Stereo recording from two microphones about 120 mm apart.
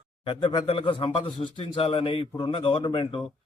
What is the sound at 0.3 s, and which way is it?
Speech, 45° left (ahead or behind).